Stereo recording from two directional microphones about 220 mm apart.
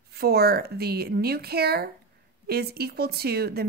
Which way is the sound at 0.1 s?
45° right (ahead or behind).